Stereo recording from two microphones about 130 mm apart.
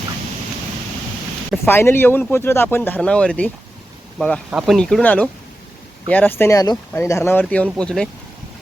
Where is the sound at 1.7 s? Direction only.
15° left (ahead or behind).